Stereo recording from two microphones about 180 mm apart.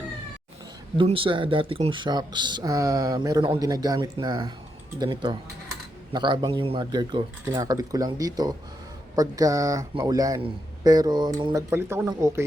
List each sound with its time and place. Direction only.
0.9 s speech: 30° right (ahead or behind); by 12.4 s 15° right (ahead or behind)